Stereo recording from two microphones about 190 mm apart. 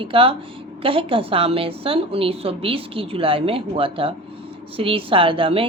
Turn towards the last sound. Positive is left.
turn(degrees=-30)  # may be behind; listen again after turning